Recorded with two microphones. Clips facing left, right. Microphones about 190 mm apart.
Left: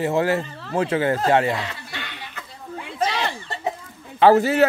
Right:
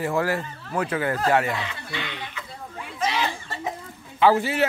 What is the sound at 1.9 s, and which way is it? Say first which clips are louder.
Chuckle: right 3 dB; 50° left (ahead or behind).